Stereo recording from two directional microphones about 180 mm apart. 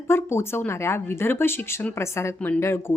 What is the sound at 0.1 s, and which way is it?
A woman's voice, 15° left (ahead or behind).